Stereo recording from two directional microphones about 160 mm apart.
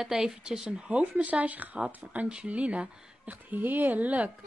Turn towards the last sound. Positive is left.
turn(degrees=-10)  # may be behind; listen again after turning